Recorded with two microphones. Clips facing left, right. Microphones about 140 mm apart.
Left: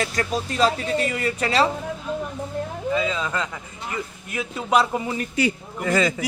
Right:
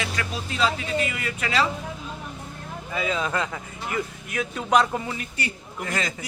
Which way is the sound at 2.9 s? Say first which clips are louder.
Left 1 dB; 15° right (ahead or behind).